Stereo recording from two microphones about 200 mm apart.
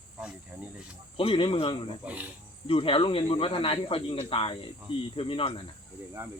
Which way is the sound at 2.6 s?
25° left (ahead or behind).